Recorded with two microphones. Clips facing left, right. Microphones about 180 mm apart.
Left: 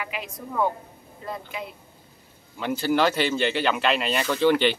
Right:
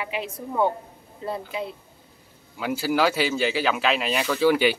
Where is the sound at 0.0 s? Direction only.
30° right (ahead or behind).